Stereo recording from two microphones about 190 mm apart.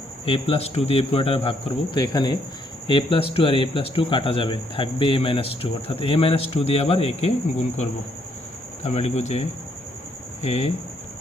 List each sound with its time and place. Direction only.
0.3 s speech: 30° left (ahead or behind)